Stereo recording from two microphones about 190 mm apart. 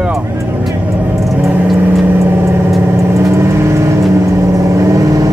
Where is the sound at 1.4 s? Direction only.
10° right (ahead or behind).